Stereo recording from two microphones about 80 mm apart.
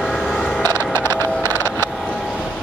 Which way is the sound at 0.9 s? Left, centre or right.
Left.